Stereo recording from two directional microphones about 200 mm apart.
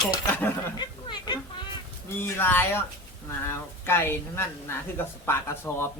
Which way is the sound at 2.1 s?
10° left (ahead or behind).